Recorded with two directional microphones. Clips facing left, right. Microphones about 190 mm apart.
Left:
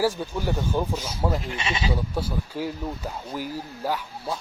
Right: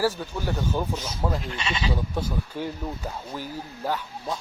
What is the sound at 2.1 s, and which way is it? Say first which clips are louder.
Speech: left 1 dB; 5° left (ahead or behind).